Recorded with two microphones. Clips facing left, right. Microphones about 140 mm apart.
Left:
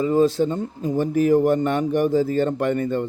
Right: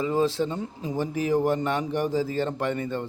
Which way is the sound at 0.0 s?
45° left (ahead or behind).